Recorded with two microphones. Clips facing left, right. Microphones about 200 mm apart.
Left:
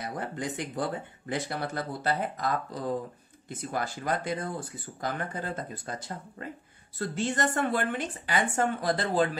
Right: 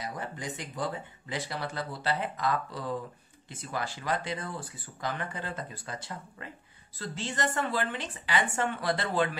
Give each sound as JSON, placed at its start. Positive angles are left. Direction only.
{"t": 0.0, "sound": "speech", "side_deg": 60}
{"t": 7.0, "sound": "speech", "side_deg": 50}